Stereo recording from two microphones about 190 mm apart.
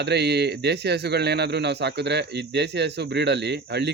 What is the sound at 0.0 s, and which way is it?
A man's voice, 60° right (ahead or behind).